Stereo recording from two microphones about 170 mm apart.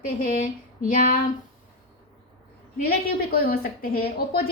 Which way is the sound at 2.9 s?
60° left (ahead or behind).